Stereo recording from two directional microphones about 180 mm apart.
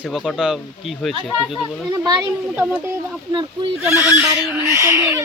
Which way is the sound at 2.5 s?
10° right (ahead or behind).